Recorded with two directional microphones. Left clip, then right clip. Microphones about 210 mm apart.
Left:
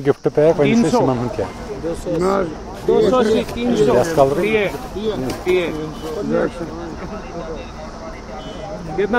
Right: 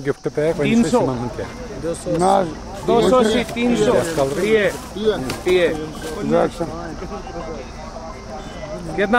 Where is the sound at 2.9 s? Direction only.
50° right (ahead or behind).